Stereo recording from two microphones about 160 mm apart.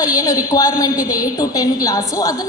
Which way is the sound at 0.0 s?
20° left (ahead or behind).